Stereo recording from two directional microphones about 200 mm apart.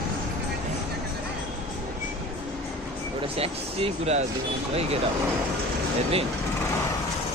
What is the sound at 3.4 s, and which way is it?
Speech, 30° right (ahead or behind).